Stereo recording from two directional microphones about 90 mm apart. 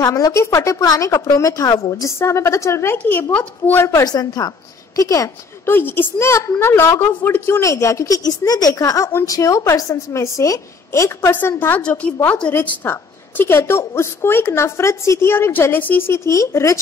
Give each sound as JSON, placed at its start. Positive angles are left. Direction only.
{"t": 0.0, "sound": "a woman's voice", "side_deg": 40}
{"t": 4.0, "sound": "a woman's voice", "side_deg": 45}
{"t": 5.7, "sound": "a woman's voice", "side_deg": 25}